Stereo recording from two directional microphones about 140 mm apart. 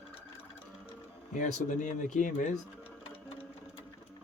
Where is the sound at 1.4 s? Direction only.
60° left (ahead or behind).